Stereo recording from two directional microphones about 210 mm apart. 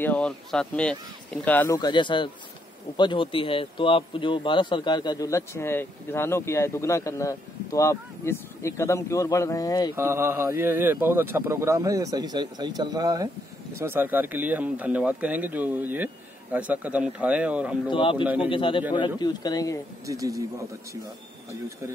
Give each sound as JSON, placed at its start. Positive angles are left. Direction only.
{"t": 0.0, "sound": "speech", "side_deg": 5}
{"t": 1.8, "sound": "speech", "side_deg": 20}
{"t": 9.9, "sound": "speech", "side_deg": -10}
{"t": 17.8, "sound": "speech", "side_deg": 25}
{"t": 18.2, "sound": "speech", "side_deg": -5}
{"t": 18.5, "sound": "speech", "side_deg": 25}
{"t": 20.1, "sound": "speech", "side_deg": -15}